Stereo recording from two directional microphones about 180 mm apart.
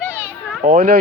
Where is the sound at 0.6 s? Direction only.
55° right (ahead or behind).